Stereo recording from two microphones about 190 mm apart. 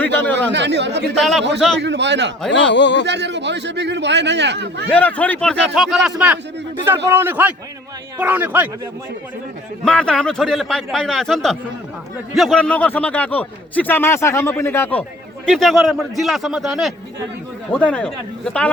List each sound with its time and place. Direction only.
0.5 s a man's voice: 65° right (ahead or behind)
1.2 s a man's voice: centre (ahead or behind)
1.8 s a man's voice: 65° right (ahead or behind)
2.5 s speech: 70° left (ahead or behind)
3.1 s a man's voice: 65° right (ahead or behind)
4.9 s a man's voice: 10° left (ahead or behind); by 8.7 s 10° right (ahead or behind)
9.8 s a man's voice: 5° left (ahead or behind)